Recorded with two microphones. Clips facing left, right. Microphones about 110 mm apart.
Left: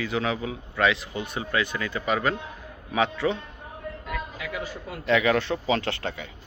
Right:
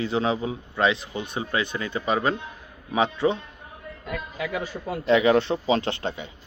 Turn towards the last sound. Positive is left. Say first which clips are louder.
# right 2 dB
turn(degrees=-20)  # may be behind; listen again after turning